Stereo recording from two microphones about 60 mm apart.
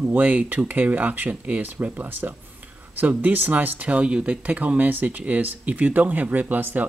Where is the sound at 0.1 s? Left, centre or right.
Right.